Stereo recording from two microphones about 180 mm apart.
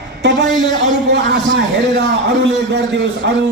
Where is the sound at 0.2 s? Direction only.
75° right (ahead or behind).